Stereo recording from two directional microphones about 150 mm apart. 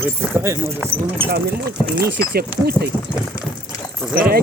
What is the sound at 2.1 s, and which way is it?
Speech, 90° right.